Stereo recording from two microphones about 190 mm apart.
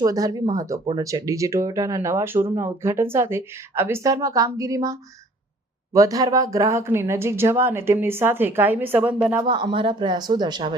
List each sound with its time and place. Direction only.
0.0 s speech: 20° right (ahead or behind)
9.4 s speech: 25° right (ahead or behind)